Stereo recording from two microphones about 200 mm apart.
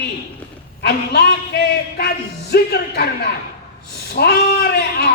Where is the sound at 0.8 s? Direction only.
55° left (ahead or behind).